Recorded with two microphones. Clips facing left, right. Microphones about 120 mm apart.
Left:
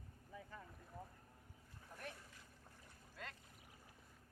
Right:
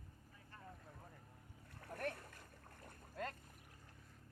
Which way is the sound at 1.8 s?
60° right (ahead or behind).